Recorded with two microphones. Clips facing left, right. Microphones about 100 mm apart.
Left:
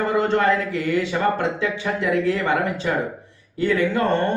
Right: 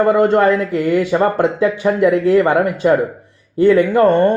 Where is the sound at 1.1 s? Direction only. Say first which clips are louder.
Right 9 dB; 30° right (ahead or behind).